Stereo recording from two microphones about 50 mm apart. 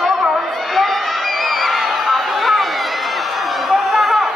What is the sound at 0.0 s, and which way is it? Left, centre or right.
Crowd, centre.